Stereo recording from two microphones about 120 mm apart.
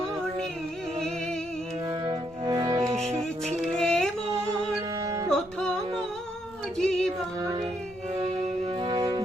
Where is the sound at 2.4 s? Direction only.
35° right (ahead or behind).